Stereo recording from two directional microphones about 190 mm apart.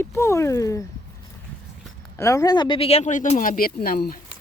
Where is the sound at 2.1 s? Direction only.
15° left (ahead or behind); by 4.2 s 50° left (ahead or behind).